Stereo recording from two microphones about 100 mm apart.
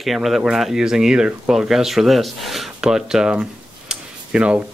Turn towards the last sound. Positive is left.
turn(degrees=-10)  # may be behind; listen again after turning